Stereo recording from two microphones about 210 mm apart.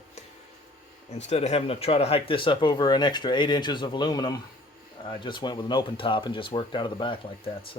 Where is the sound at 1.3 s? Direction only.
30° left (ahead or behind).